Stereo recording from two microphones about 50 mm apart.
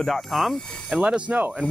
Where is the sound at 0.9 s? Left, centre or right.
Right.